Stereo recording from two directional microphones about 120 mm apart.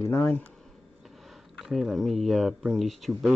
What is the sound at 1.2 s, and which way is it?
Speech, centre (ahead or behind).